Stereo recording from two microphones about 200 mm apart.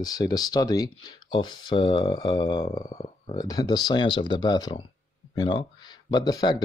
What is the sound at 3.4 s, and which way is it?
Speech, 20° left (ahead or behind).